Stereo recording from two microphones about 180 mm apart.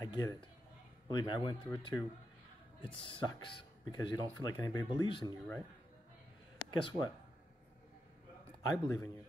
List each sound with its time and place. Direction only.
0.0 s a sound: 20° left (ahead or behind)
1.1 s speech: 25° left (ahead or behind)
6.6 s speech: 25° left (ahead or behind)
8.8 s a man's voice: 20° left (ahead or behind)